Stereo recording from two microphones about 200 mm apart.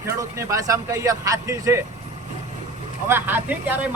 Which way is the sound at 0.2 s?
15° right (ahead or behind).